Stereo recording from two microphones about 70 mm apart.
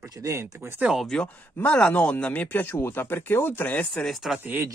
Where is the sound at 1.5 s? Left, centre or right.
Centre.